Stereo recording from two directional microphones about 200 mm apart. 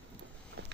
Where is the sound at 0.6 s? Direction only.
60° right (ahead or behind).